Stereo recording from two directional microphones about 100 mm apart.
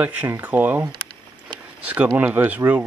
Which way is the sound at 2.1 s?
15° right (ahead or behind).